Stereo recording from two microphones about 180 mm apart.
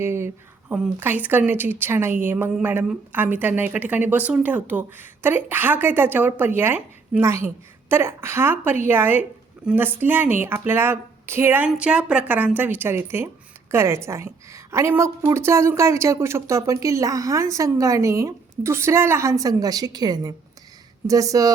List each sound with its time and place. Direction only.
0.0 s speech: 15° right (ahead or behind)